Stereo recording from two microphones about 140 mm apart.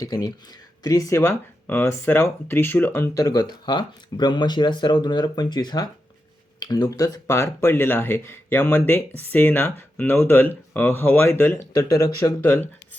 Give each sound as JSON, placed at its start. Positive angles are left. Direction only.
{"t": 0.0, "sound": "speech", "side_deg": 30}
{"t": 12.4, "sound": "speech", "side_deg": 15}